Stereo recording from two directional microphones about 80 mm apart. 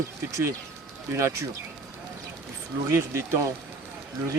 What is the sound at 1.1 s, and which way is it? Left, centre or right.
Speech, right.